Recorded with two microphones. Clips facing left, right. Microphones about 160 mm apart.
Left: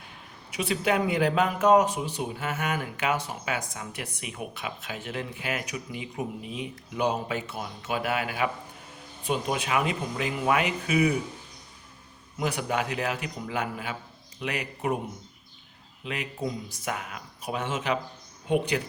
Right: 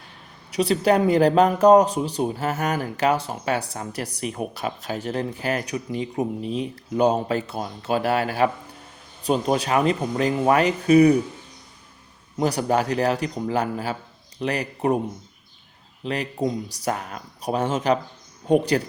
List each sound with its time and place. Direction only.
0.5 s speech: 35° right (ahead or behind)
12.4 s speech: 35° right (ahead or behind)
16.0 s speech: 35° right (ahead or behind)